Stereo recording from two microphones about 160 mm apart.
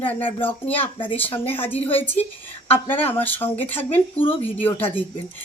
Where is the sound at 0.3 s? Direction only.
10° left (ahead or behind).